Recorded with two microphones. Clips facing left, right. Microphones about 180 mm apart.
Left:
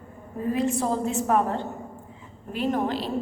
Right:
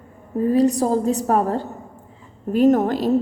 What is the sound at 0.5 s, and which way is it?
A woman's voice, 40° right (ahead or behind).